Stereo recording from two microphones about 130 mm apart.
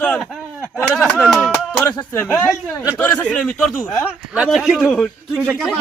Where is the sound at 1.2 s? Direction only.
Centre (ahead or behind).